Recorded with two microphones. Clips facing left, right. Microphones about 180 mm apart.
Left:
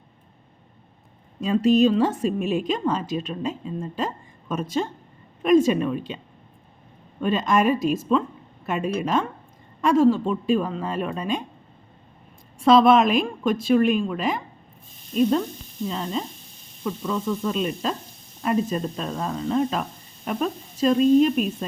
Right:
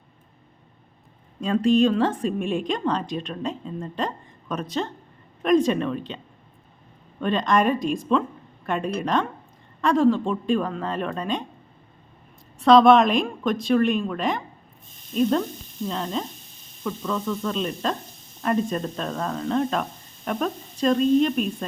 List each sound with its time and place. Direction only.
1.4 s speech: 5° left (ahead or behind)
7.2 s speech: 5° left (ahead or behind)
12.5 s speech: 5° left (ahead or behind)